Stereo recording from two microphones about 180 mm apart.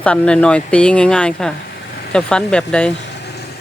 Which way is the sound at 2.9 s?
70° left (ahead or behind).